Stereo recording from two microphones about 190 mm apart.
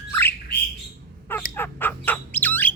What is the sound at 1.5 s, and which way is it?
Bird, 10° left (ahead or behind).